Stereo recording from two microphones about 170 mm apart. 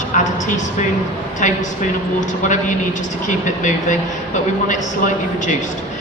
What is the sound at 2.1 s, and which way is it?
A woman's voice, 45° left (ahead or behind).